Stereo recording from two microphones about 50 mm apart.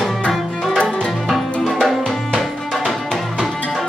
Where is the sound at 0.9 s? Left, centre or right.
Centre.